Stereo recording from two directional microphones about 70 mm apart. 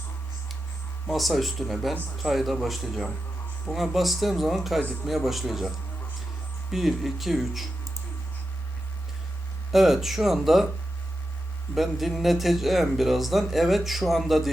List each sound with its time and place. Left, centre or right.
1.1 s speech: centre
9.7 s speech: centre
11.7 s speech: centre